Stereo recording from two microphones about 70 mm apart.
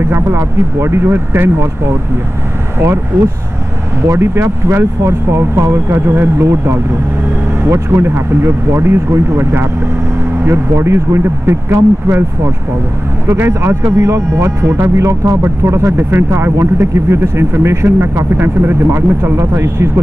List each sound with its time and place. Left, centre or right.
0.1 s speech: right
4.1 s speech: right
13.3 s speech: right